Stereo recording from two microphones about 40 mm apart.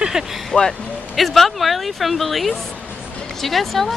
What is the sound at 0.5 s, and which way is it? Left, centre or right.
Speech, left.